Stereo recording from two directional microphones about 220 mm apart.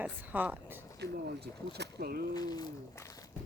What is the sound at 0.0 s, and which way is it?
Speech, 5° right (ahead or behind).